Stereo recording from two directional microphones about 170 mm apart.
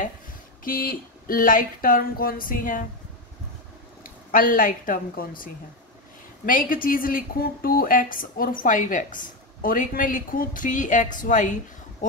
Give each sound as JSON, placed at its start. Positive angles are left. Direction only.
{"t": 0.7, "sound": "speech", "side_deg": 55}
{"t": 4.0, "sound": "a woman's voice", "side_deg": 55}